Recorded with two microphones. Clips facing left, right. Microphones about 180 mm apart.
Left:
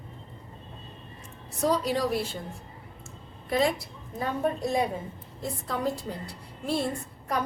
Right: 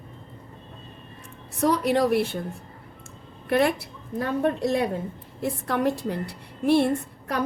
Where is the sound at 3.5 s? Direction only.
65° right (ahead or behind).